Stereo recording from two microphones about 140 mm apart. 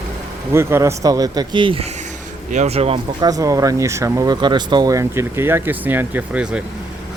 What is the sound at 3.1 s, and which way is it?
Speech, 25° right (ahead or behind).